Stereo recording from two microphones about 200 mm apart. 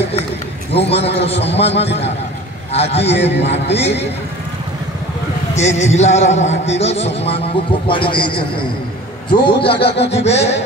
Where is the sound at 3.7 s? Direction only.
60° left (ahead or behind).